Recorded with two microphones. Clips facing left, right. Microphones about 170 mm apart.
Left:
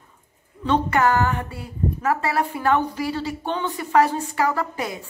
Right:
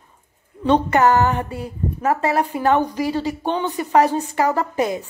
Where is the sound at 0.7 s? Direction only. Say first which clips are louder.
Right 4 dB; 20° right (ahead or behind).